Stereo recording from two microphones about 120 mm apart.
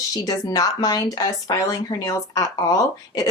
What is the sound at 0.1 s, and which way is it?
Speech, 30° left (ahead or behind).